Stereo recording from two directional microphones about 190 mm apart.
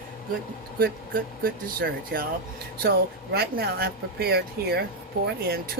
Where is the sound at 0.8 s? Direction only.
50° right (ahead or behind).